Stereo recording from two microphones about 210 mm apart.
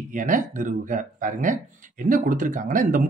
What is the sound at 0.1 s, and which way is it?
Speech, 40° right (ahead or behind).